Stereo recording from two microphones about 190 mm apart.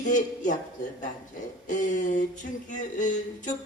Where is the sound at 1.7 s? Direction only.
45° left (ahead or behind).